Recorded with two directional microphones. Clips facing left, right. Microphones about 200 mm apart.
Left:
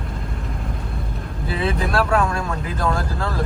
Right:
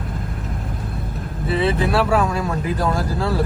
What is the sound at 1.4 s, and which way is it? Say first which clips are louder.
Vehicle: right 4 dB; centre (ahead or behind).